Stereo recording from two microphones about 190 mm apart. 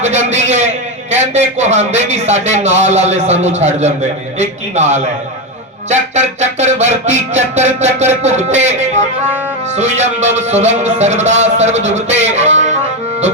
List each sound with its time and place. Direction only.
0.0 s music: 35° right (ahead or behind)